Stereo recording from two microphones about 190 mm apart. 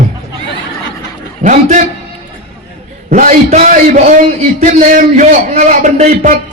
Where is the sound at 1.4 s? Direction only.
40° right (ahead or behind).